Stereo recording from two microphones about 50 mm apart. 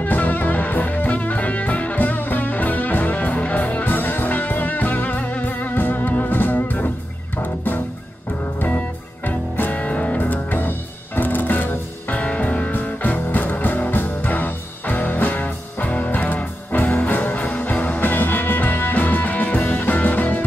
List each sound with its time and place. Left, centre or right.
0.0 s music: left
12.2 s music: left